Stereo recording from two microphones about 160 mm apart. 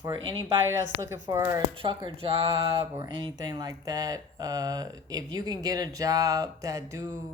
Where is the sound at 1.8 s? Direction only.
30° right (ahead or behind).